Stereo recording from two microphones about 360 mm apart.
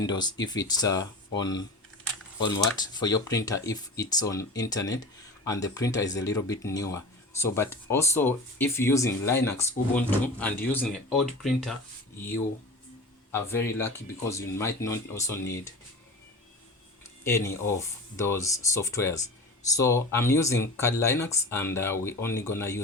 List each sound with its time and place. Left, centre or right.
0.0 s speech: centre
2.7 s speech: centre
13.3 s speech: centre
17.2 s speech: centre